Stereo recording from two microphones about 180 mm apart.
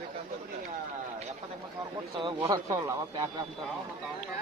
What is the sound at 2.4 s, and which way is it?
A man's voice, 20° right (ahead or behind).